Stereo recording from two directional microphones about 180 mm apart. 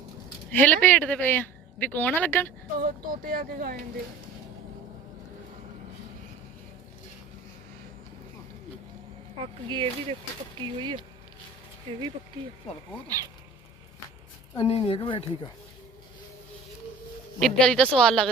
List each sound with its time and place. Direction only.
0.5 s speech: 10° left (ahead or behind)
2.7 s speech: 55° right (ahead or behind)
9.4 s speech: 25° right (ahead or behind)
14.5 s speech: 30° left (ahead or behind)
17.4 s speech: 5° left (ahead or behind)